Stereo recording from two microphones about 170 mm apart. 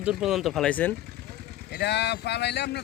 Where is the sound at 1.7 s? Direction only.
80° left.